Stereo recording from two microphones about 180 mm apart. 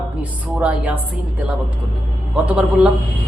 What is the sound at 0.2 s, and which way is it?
Speech, 5° right (ahead or behind).